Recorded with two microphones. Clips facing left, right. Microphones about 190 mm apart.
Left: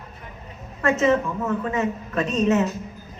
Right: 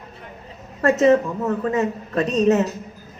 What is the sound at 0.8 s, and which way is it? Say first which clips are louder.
Speech: right 4 dB; 35° right (ahead or behind).